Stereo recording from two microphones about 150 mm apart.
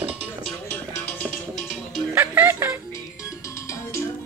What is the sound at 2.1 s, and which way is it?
Music, 15° right (ahead or behind).